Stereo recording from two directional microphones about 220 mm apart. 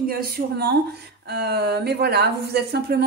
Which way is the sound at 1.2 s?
50° right (ahead or behind).